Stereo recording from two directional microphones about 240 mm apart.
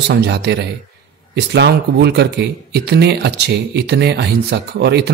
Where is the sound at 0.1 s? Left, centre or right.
Right.